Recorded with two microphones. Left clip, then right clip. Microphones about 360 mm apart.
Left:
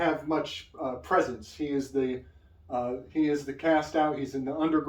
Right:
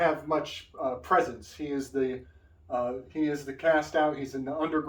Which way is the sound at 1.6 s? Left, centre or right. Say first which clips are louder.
Left 2 dB; centre.